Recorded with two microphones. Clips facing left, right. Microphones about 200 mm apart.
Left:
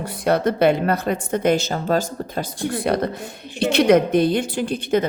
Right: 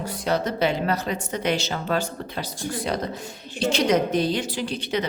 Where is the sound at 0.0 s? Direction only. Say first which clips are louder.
Left 5 dB; 55° left (ahead or behind).